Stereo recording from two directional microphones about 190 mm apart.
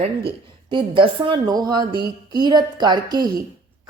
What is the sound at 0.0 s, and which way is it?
Speech, 25° right (ahead or behind).